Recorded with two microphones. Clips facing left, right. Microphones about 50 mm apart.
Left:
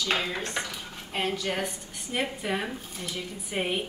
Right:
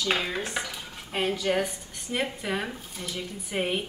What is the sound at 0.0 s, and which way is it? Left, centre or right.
A woman's voice, centre.